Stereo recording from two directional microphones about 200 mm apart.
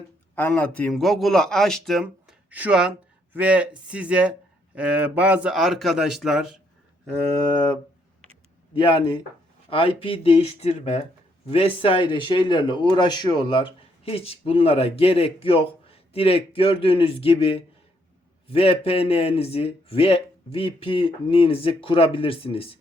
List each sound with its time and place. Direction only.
0.3 s speech: 10° left (ahead or behind)
9.6 s speech: 25° left (ahead or behind)